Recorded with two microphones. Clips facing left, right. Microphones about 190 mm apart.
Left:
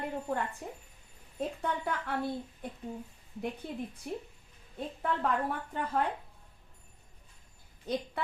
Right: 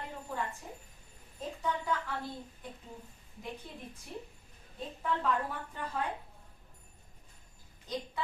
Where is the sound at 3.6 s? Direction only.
60° left (ahead or behind).